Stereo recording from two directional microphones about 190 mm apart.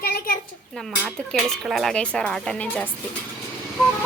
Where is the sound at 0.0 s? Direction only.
50° left (ahead or behind).